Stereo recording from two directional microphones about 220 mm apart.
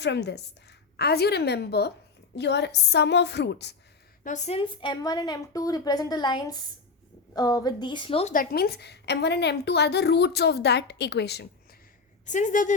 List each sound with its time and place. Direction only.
0.0 s a woman's voice: 50° left (ahead or behind)
4.2 s a woman's voice: 35° left (ahead or behind)
8.3 s a woman's voice: 40° left (ahead or behind)
12.2 s a woman's voice: 35° left (ahead or behind)